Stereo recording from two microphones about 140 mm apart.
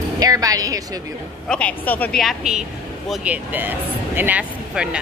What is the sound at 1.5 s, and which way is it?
Speech, 10° left (ahead or behind).